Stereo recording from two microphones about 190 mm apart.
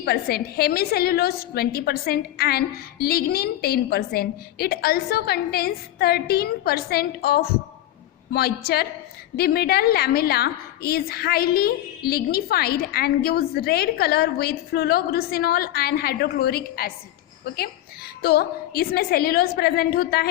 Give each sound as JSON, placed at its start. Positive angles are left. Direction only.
{"t": 0.0, "sound": "a woman's voice", "side_deg": 55}
{"t": 18.2, "sound": "a woman's voice", "side_deg": 55}